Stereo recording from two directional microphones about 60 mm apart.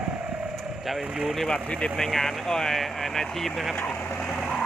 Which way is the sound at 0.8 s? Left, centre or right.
Centre.